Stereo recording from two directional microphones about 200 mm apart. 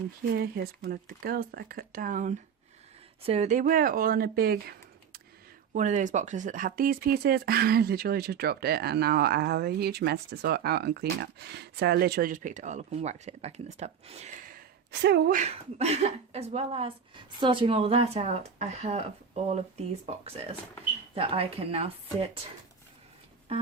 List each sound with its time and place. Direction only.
0.3 s speech: 50° right (ahead or behind)
5.7 s speech: 40° right (ahead or behind)
14.5 s a sound: 55° right (ahead or behind)
15.4 s speech: 30° right (ahead or behind)